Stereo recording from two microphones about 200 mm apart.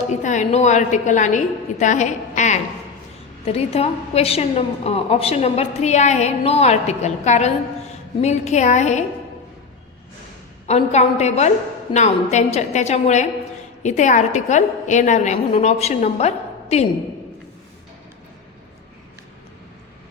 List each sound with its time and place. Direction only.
0.1 s a woman's voice: 35° left (ahead or behind)
10.7 s a woman's voice: 35° left (ahead or behind)